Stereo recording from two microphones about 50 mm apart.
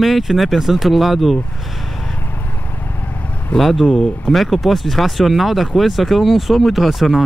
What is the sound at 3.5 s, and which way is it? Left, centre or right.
Speech, centre.